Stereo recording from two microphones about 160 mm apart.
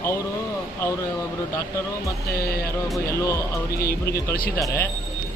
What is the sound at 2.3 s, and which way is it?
Speech, 70° left (ahead or behind).